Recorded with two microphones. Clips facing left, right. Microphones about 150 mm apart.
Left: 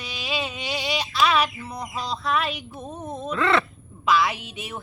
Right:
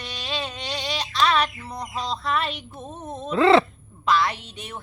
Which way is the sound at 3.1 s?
Centre (ahead or behind).